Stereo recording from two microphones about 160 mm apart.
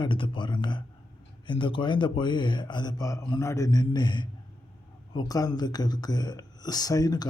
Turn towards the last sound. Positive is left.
turn(degrees=25)  # may be behind; listen again after turning